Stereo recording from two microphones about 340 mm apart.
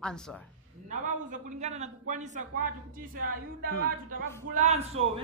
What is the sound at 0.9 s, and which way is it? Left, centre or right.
A man's voice, right.